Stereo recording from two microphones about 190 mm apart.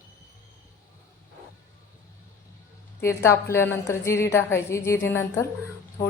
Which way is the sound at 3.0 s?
15° left (ahead or behind).